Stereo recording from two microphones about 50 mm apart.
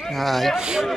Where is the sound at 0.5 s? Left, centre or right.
Centre.